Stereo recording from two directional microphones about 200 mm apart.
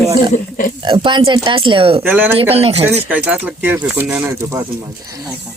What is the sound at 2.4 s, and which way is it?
Speech, 30° right (ahead or behind).